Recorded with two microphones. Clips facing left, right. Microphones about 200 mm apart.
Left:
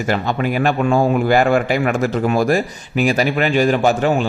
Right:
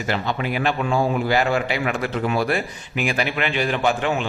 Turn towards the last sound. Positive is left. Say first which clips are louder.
# left 6 dB
turn(degrees=40)  # may be behind; listen again after turning